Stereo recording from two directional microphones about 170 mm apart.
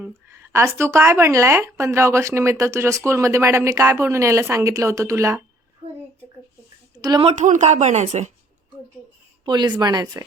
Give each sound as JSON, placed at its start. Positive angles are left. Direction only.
{"t": 0.0, "sound": "a woman's voice", "side_deg": -15}
{"t": 7.0, "sound": "speech", "side_deg": -25}
{"t": 7.3, "sound": "speech", "side_deg": -45}
{"t": 9.4, "sound": "a woman's voice", "side_deg": -25}